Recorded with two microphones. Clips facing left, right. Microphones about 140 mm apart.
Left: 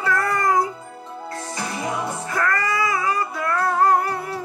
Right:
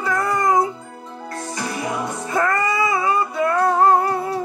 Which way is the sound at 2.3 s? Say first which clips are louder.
Right 4 dB; 20° right (ahead or behind).